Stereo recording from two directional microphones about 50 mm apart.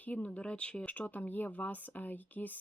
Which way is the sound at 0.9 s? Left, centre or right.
Left.